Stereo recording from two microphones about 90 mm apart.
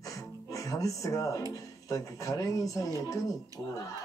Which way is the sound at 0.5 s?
40° left (ahead or behind).